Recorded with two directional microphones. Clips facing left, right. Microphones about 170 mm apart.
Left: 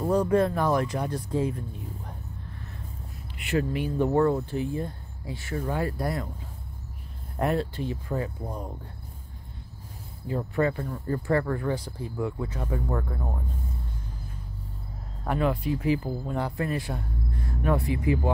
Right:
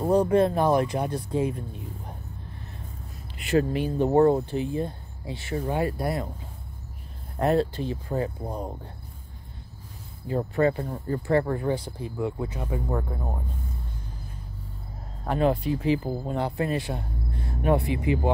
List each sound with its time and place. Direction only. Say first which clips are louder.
0.0 s speech: right 2 dB; 30° right (ahead or behind)
3.3 s speech: right 4 dB; 30° right (ahead or behind)
7.4 s speech: right 4 dB; 30° right (ahead or behind)
10.2 s speech: right 3 dB; 30° right (ahead or behind)
15.3 s speech: right 3 dB; 30° right (ahead or behind)